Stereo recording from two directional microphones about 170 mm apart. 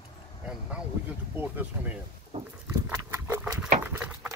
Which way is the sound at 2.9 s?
15° right (ahead or behind).